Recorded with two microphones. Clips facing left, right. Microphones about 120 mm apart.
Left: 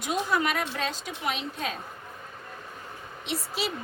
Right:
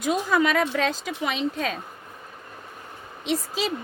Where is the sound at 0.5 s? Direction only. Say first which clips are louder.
Right 7 dB; 90° right.